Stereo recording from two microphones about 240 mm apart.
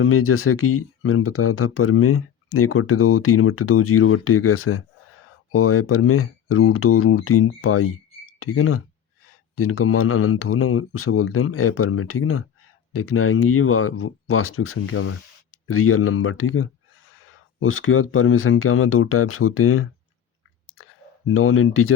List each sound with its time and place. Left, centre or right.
0.0 s speech: left
20.7 s clicking: left